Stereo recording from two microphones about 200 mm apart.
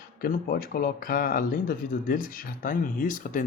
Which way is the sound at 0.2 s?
50° left (ahead or behind).